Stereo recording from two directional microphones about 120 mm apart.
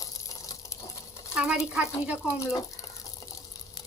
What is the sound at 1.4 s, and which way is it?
Speech, 5° right (ahead or behind).